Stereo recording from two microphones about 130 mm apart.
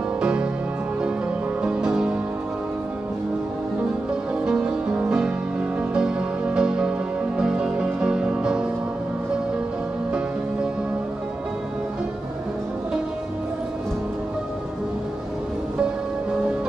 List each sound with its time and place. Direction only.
0.2 s music: 5° right (ahead or behind)
1.6 s music: 5° right (ahead or behind)
4.5 s music: 5° right (ahead or behind)